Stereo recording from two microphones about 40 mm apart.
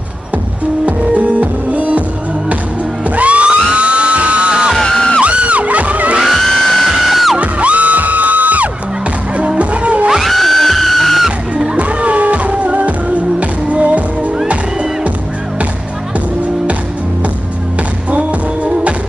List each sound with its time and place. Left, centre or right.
0.8 s music: right
3.2 s music: right
4.8 s music: centre
5.2 s music: right
6.2 s music: centre
7.3 s music: right
10.2 s music: centre
11.5 s music: right
18.1 s music: right